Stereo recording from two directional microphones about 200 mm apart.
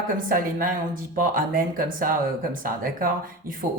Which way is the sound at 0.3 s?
45° right (ahead or behind).